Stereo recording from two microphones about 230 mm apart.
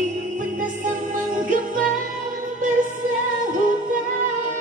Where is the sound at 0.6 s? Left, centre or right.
Right.